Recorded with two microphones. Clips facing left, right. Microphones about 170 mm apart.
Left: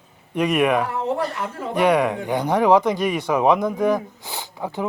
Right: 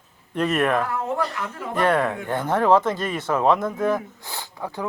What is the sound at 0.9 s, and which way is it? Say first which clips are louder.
Speech: left 2 dB; 30° left (ahead or behind).